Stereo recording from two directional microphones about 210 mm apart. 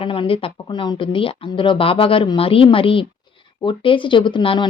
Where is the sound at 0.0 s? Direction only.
25° left (ahead or behind).